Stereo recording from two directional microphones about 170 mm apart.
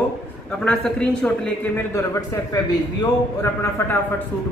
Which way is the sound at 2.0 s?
20° left (ahead or behind).